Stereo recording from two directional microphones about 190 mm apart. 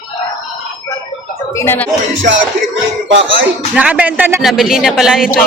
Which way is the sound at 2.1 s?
75° right (ahead or behind).